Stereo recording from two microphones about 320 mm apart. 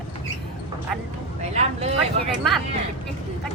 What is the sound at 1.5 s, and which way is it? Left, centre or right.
Speech, centre.